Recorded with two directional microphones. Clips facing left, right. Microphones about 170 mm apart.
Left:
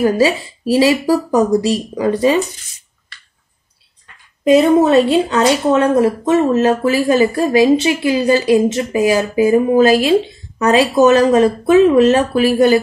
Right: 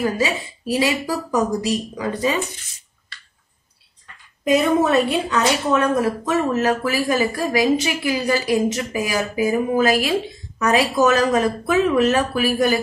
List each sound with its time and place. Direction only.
0.0 s speech: 30° left (ahead or behind)
4.5 s speech: 30° left (ahead or behind)